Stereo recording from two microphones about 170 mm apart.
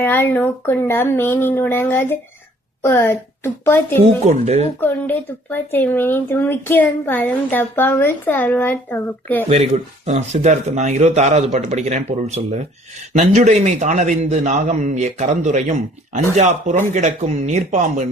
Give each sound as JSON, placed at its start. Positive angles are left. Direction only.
{"t": 0.0, "sound": "speech", "side_deg": 15}
{"t": 4.3, "sound": "speech", "side_deg": -40}
{"t": 4.8, "sound": "speech", "side_deg": 10}
{"t": 9.5, "sound": "a man's voice", "side_deg": -40}